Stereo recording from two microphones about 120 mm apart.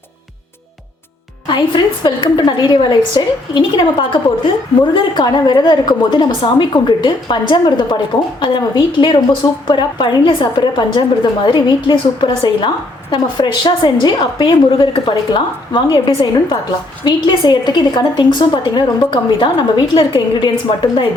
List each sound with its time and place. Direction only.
1.5 s a woman's voice: 40° left (ahead or behind)
4.9 s a woman's voice: 35° left (ahead or behind)